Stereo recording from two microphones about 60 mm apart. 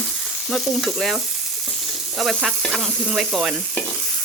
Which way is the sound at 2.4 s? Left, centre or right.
Centre.